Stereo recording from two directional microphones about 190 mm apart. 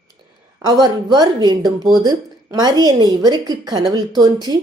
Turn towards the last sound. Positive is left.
turn(degrees=-20)  # may be behind; listen again after turning